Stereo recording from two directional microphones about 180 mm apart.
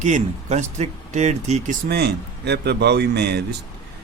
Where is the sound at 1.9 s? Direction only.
65° right (ahead or behind).